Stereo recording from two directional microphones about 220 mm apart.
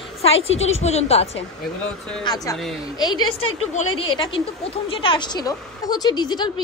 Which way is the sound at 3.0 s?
20° left (ahead or behind).